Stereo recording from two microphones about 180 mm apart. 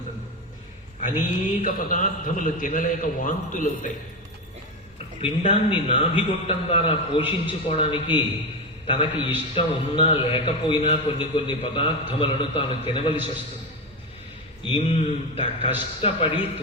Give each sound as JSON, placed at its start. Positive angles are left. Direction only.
{"t": 1.6, "sound": "a man's voice", "side_deg": 45}
{"t": 5.2, "sound": "a man's voice", "side_deg": 30}
{"t": 14.6, "sound": "a man's voice", "side_deg": 30}